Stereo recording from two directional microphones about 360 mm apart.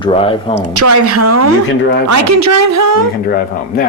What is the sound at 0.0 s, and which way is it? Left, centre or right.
Speech, centre.